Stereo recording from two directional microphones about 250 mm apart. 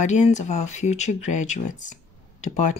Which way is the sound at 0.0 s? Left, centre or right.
Left.